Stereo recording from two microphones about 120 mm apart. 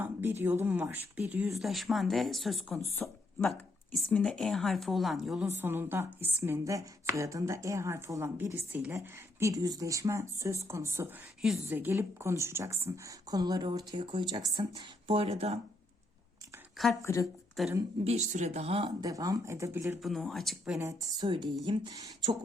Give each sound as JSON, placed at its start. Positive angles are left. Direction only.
{"t": 0.0, "sound": "speech", "side_deg": -15}
{"t": 1.5, "sound": "speech", "side_deg": 0}
{"t": 5.5, "sound": "speech", "side_deg": -20}
{"t": 9.4, "sound": "speech", "side_deg": -30}
{"t": 17.0, "sound": "speech", "side_deg": 25}
{"t": 17.6, "sound": "speech", "side_deg": 0}
{"t": 18.0, "sound": "speech", "side_deg": -70}
{"t": 19.0, "sound": "speech", "side_deg": -30}
{"t": 20.0, "sound": "speech", "side_deg": 0}
{"t": 21.2, "sound": "speech", "side_deg": -40}